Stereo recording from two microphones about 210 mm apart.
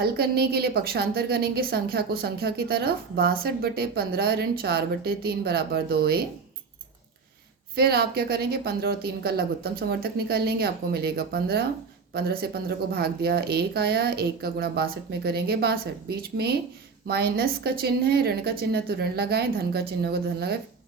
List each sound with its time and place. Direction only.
0.0 s a woman's voice: 50° right (ahead or behind)
7.8 s a woman's voice: 45° right (ahead or behind)